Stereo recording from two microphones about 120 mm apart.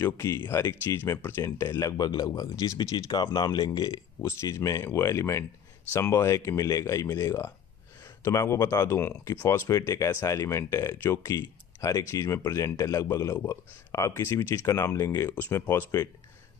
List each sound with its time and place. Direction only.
0.0 s speech: 25° left (ahead or behind)